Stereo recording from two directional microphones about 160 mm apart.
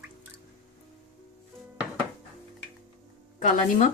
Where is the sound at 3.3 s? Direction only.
55° left (ahead or behind).